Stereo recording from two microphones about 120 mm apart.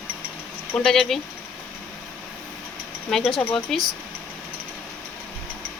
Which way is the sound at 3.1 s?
Centre (ahead or behind).